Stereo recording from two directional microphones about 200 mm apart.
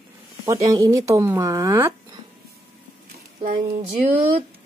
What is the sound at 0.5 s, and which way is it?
Speech, 15° right (ahead or behind).